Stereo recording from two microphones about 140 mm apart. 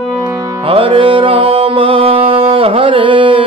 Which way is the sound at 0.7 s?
40° right (ahead or behind).